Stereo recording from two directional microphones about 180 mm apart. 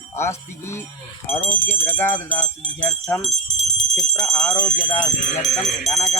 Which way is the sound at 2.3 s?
5° left (ahead or behind).